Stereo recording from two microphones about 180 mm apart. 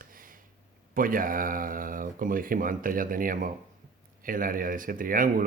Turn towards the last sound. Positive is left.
turn(degrees=-50)  # may be behind; listen again after turning